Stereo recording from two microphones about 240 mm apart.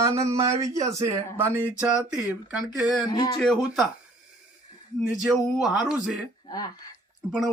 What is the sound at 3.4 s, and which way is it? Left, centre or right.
Speech, centre.